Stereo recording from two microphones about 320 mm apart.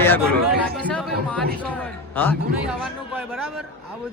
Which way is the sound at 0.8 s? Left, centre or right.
Centre.